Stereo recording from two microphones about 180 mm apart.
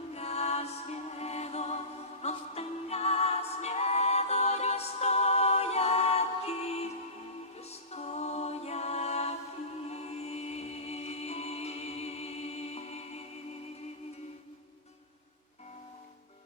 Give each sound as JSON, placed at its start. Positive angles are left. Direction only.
{"t": 0.1, "sound": "music", "side_deg": 35}